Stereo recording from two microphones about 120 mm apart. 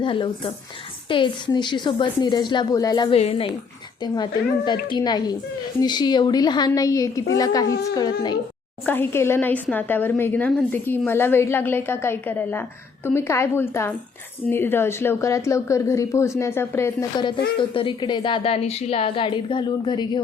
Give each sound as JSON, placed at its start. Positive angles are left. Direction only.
{"t": 0.0, "sound": "a woman's voice", "side_deg": 45}
{"t": 3.1, "sound": "a woman's voice", "side_deg": 55}
{"t": 4.0, "sound": "a woman's voice", "side_deg": 35}
{"t": 8.9, "sound": "a woman's voice", "side_deg": 20}
{"t": 17.2, "sound": "a woman's voice", "side_deg": 45}